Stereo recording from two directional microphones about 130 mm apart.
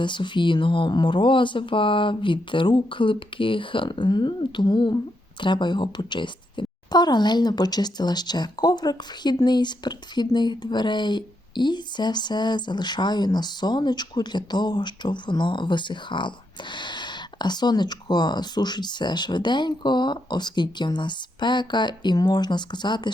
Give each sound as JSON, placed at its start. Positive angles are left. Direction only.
{"t": 0.0, "sound": "speech", "side_deg": 40}